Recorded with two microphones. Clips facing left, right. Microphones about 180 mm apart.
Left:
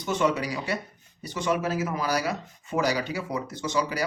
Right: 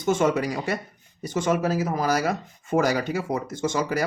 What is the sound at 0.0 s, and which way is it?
Speech, 50° right (ahead or behind).